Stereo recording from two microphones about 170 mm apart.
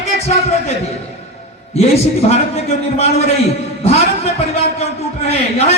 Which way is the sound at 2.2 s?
40° left (ahead or behind).